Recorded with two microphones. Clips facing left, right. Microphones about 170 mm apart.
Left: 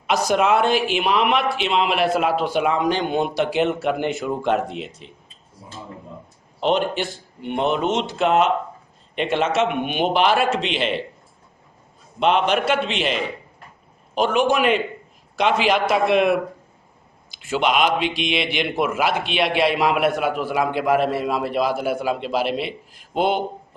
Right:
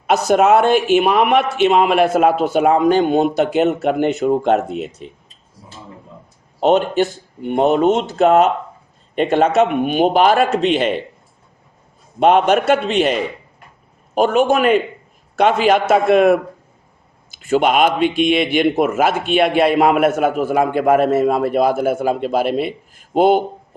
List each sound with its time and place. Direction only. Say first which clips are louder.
0.3 s a man's voice: right 6 dB; 45° right (ahead or behind)
6.6 s a man's voice: right 6 dB; 45° right (ahead or behind)
12.2 s a man's voice: right 6 dB; 45° right (ahead or behind)
17.5 s a man's voice: right 5 dB; 50° right (ahead or behind)